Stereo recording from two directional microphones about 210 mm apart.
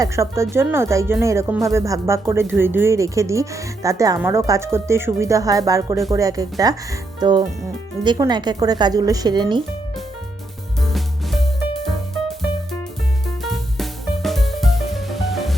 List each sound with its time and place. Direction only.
0.0 s speech: 15° right (ahead or behind)
10.8 s music: centre (ahead or behind)
13.2 s music: centre (ahead or behind)